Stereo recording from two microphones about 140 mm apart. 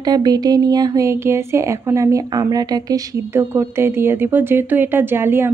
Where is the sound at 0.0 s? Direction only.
30° right (ahead or behind).